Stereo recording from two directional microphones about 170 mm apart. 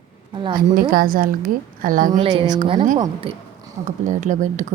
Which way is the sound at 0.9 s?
55° right (ahead or behind).